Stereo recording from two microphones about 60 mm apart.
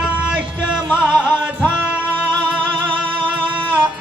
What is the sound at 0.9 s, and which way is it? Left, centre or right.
Music, left.